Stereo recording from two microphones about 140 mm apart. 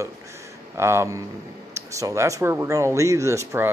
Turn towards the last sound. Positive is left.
turn(degrees=-20)  # may be behind; listen again after turning